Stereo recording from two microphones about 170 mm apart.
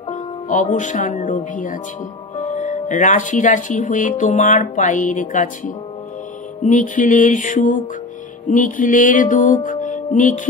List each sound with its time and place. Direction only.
0.1 s speech: 50° left (ahead or behind)